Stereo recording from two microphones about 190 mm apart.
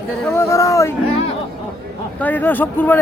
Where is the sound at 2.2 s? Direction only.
10° left (ahead or behind).